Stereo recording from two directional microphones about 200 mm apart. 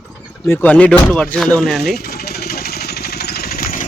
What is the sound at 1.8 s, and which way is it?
Vehicle, 50° left (ahead or behind).